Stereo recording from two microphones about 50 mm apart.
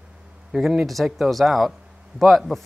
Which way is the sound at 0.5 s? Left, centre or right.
Centre.